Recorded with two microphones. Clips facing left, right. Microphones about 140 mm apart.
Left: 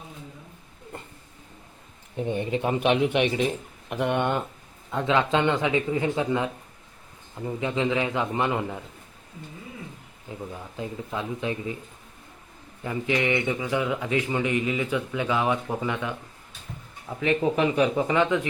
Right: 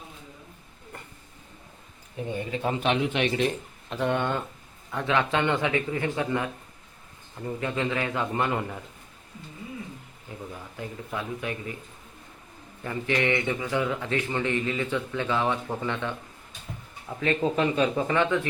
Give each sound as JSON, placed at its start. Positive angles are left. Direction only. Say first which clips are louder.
{"t": 0.9, "sound": "a sound", "louder": "left 4 dB", "side_deg": 25}
{"t": 2.1, "sound": "a man's voice", "louder": "left 4 dB", "side_deg": 25}
{"t": 2.8, "sound": "a man's voice", "louder": "left 4 dB", "side_deg": 10}
{"t": 10.5, "sound": "a man's voice", "louder": "left 4 dB", "side_deg": 20}
{"t": 12.8, "sound": "a man's voice", "louder": "left 1 dB", "side_deg": 15}
{"t": 17.2, "sound": "a man's voice", "louder": "left 2 dB", "side_deg": 15}